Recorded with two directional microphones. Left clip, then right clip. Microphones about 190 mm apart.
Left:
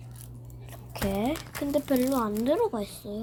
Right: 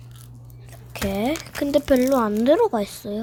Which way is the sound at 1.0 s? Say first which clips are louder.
Right 5 dB; 25° right (ahead or behind).